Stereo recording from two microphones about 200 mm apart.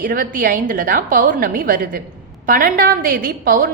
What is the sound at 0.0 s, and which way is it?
A woman's voice, 45° right (ahead or behind).